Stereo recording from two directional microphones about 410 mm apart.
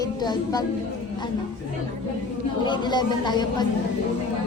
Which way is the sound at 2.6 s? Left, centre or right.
Centre.